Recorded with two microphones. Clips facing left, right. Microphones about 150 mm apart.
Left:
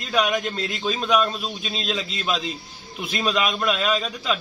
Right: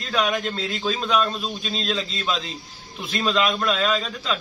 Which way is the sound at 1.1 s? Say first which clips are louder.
Left 3 dB; 5° left (ahead or behind).